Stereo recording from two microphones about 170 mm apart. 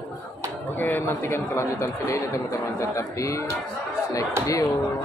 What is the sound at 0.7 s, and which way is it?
Speech, 10° left (ahead or behind).